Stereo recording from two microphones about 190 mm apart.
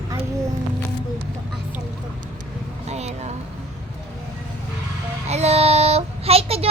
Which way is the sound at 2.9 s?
35° right (ahead or behind).